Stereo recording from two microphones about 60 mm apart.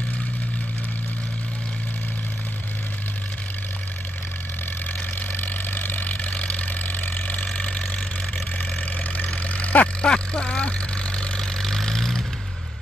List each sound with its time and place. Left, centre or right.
5.3 s vehicle: left
9.1 s vehicle: left; by 12.2 s centre